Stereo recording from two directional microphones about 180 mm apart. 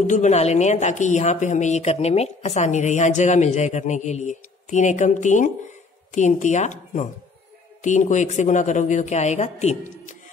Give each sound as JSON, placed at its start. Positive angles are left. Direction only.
{"t": 0.0, "sound": "a woman's voice", "side_deg": 40}